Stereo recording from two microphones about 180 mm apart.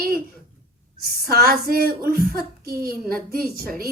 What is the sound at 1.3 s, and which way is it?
A woman's voice, 55° right (ahead or behind).